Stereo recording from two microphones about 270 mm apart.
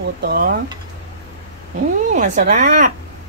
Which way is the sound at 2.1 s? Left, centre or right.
Right.